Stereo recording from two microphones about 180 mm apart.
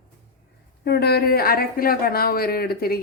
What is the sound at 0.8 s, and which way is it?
Speech, 65° left (ahead or behind).